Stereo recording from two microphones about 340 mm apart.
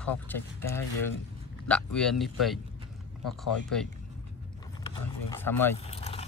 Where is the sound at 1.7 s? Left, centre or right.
Centre.